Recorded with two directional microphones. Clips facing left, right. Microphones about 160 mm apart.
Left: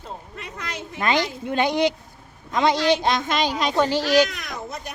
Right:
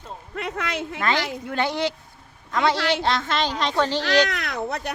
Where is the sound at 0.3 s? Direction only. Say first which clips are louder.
Right 9 dB; 65° right (ahead or behind).